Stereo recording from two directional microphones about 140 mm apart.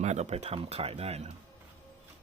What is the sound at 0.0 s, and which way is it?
Speech, 55° right (ahead or behind).